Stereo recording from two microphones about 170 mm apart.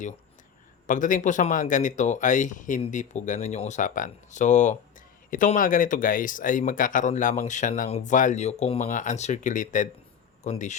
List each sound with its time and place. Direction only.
0.9 s speech: 50° left (ahead or behind)